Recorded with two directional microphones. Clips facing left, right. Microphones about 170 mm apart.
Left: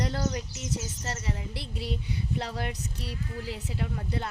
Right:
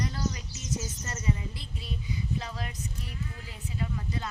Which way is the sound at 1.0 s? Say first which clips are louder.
Right 2 dB; 75° left (ahead or behind).